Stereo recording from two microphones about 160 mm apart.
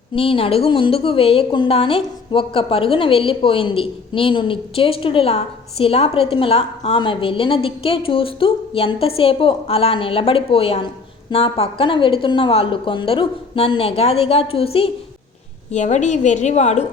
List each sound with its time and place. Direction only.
0.1 s a woman's voice: 35° left (ahead or behind)
15.7 s a woman's voice: 45° left (ahead or behind)